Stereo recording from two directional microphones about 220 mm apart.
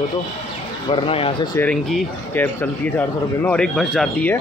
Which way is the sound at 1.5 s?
5° left (ahead or behind).